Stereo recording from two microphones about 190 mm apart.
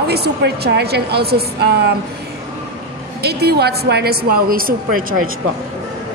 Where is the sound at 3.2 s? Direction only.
60° right (ahead or behind).